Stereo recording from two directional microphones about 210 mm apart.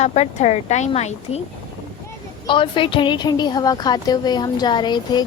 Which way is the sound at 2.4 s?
25° left (ahead or behind).